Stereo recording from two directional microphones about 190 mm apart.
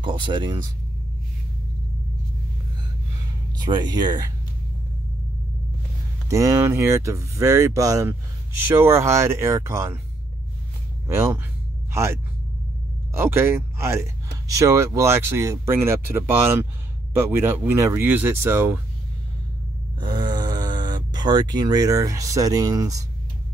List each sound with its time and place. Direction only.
0.0 s speech: 25° right (ahead or behind)
3.5 s speech: 20° right (ahead or behind)
6.2 s speech: 15° right (ahead or behind)
11.1 s speech: 15° right (ahead or behind)
20.0 s speech: 25° right (ahead or behind)